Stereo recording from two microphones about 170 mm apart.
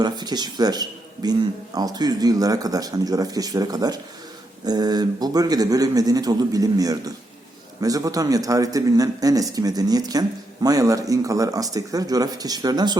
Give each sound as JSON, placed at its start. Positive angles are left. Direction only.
{"t": 0.0, "sound": "speech", "side_deg": -25}